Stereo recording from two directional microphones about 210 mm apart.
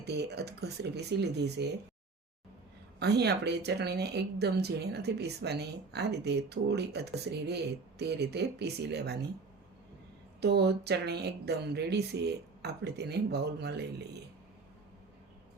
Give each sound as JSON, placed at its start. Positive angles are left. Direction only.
{"t": 0.0, "sound": "speech", "side_deg": -50}
{"t": 3.0, "sound": "speech", "side_deg": -50}
{"t": 10.4, "sound": "speech", "side_deg": -50}